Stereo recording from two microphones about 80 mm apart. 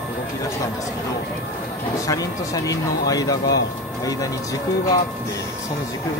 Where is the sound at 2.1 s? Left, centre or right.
Left.